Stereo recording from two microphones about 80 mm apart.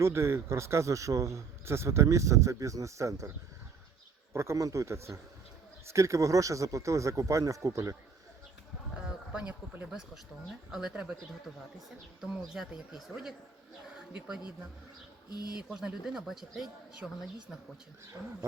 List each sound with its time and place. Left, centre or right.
0.0 s speech: right
9.0 s a sound: centre
10.7 s speech: centre
12.2 s speech: centre
14.1 s speech: centre
15.3 s speech: left
15.7 s speech: centre